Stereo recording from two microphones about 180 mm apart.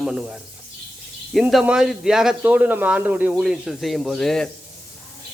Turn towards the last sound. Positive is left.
turn(degrees=5)  # may be behind; listen again after turning